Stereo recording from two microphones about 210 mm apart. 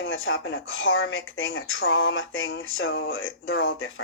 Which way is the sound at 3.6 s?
55° left (ahead or behind).